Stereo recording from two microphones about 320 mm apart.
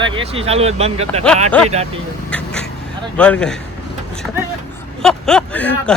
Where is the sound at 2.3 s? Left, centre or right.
Centre.